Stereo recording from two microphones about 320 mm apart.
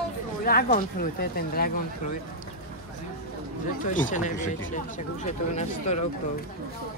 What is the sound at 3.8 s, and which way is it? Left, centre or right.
Speech, left.